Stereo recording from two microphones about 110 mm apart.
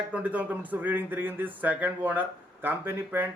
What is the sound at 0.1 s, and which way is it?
A man's voice, 15° right (ahead or behind).